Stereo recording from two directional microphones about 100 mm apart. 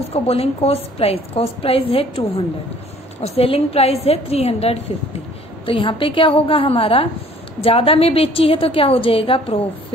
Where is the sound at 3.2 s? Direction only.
85° left.